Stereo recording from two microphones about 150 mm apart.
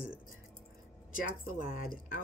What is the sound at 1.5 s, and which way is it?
Speech, 65° left (ahead or behind).